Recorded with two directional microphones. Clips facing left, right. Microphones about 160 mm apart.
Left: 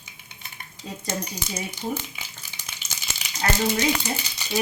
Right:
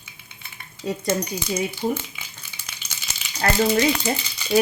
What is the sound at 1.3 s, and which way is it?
Stir, 40° left (ahead or behind).